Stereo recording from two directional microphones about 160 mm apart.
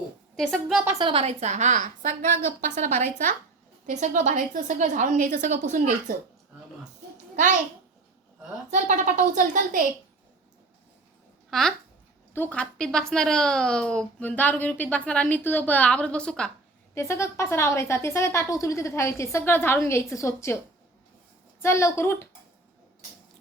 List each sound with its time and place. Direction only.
0.3 s a woman's voice: centre (ahead or behind)
0.9 s a woman's voice: 25° right (ahead or behind); by 6.1 s 50° right (ahead or behind)
8.7 s a woman's voice: 55° right (ahead or behind)
11.5 s a woman's voice: centre (ahead or behind)
16.9 s speech: 15° left (ahead or behind)
21.6 s speech: 15° left (ahead or behind)